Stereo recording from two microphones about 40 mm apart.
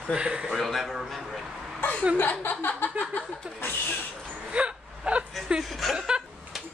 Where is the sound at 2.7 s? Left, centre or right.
Left.